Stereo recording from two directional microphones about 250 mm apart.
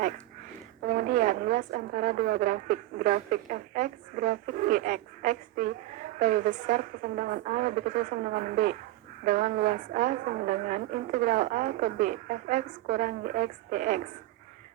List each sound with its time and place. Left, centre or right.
0.9 s a woman's voice: right